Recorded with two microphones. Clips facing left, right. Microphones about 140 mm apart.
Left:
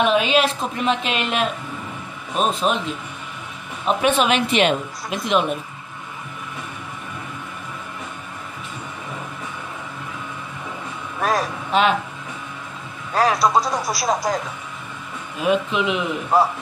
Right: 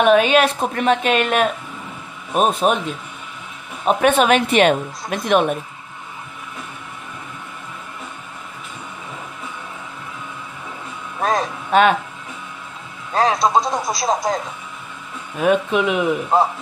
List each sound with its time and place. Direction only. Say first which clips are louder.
0.0 s a woman's voice: right 4 dB; 50° right (ahead or behind)
3.8 s a woman's voice: right 3 dB; 50° right (ahead or behind)
11.1 s speech: right 1 dB; 25° right (ahead or behind)
13.1 s speech: right 1 dB; 25° right (ahead or behind)
15.4 s a woman's voice: right 3 dB; 45° right (ahead or behind)
16.3 s speech: even; 25° right (ahead or behind)